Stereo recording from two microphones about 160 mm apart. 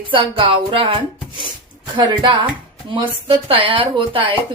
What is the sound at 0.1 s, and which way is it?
Speech, 35° right (ahead or behind).